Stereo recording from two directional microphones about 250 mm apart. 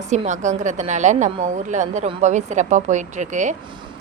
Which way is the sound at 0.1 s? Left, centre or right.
Right.